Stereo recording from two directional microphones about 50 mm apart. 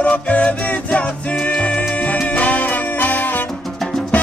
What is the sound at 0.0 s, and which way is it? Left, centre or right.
Music, left.